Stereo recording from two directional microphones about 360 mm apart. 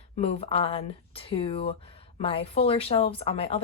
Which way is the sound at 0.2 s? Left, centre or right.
Centre.